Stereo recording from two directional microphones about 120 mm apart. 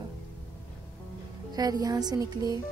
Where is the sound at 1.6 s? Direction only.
30° right (ahead or behind).